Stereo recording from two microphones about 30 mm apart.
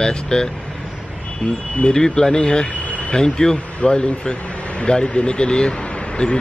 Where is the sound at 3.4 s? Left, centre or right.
Left.